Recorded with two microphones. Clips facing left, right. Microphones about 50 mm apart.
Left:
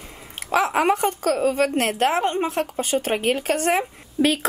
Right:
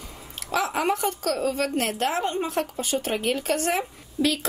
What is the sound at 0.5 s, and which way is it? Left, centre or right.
A woman's voice, left.